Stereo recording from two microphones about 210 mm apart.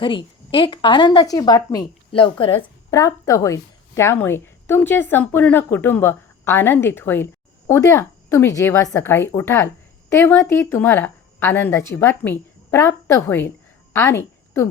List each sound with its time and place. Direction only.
0.0 s a woman's voice: 25° left (ahead or behind)
2.9 s a woman's voice: 15° left (ahead or behind)